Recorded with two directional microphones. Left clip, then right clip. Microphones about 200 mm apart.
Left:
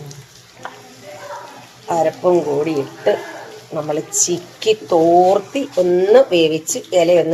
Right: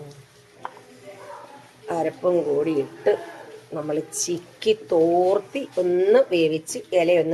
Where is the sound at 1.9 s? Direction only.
15° right (ahead or behind).